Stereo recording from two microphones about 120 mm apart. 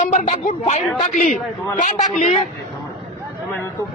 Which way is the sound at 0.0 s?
90° left.